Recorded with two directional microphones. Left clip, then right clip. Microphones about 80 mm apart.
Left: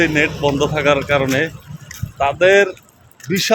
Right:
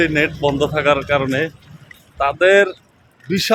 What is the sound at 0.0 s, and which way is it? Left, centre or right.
Speech, right.